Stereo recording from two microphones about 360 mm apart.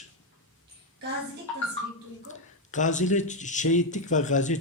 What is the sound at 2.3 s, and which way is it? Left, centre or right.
Speech, centre.